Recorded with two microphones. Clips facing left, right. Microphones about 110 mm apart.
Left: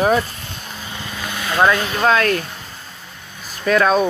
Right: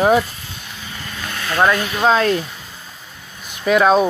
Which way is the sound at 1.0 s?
10° left (ahead or behind).